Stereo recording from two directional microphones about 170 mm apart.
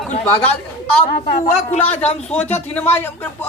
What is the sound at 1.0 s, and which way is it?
Speech, 40° left (ahead or behind).